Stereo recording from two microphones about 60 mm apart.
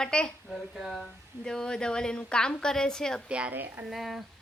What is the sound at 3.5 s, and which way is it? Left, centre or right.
Speech, right.